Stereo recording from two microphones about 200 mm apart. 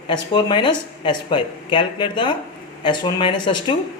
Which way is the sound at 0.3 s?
25° left (ahead or behind).